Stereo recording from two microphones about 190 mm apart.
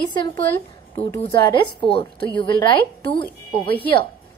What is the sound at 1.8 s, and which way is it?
A woman's voice, 30° left (ahead or behind).